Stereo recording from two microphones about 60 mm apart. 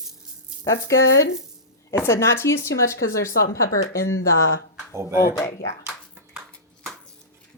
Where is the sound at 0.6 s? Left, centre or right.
Left.